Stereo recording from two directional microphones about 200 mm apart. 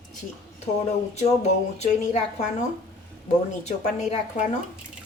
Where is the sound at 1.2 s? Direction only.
35° left (ahead or behind).